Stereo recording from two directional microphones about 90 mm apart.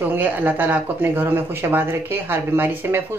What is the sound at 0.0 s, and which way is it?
Speech, 20° right (ahead or behind).